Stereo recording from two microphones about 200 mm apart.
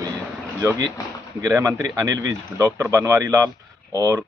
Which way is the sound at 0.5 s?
15° right (ahead or behind).